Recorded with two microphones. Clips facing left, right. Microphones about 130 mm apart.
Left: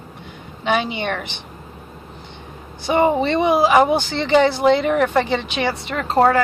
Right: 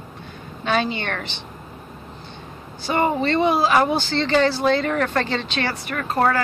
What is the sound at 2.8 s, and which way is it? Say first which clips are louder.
Speech: left 4 dB; 20° left (ahead or behind).